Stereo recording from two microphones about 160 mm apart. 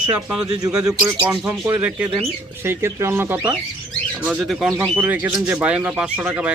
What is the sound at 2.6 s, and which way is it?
Speech, 15° right (ahead or behind).